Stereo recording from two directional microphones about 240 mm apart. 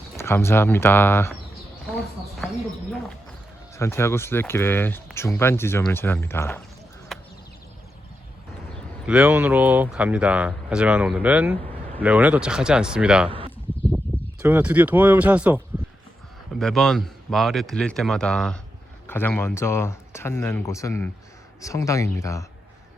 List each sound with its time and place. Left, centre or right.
0.2 s speech: centre
3.8 s speech: centre
7.1 s whip: centre
9.0 s speech: centre
14.4 s speech: centre